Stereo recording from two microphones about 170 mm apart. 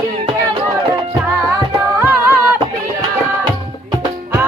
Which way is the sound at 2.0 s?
15° right (ahead or behind).